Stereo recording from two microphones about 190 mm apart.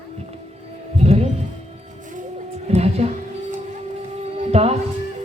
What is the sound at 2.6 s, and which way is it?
Music, 35° right (ahead or behind).